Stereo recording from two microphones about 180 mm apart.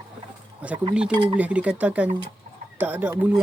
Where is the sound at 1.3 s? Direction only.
5° right (ahead or behind).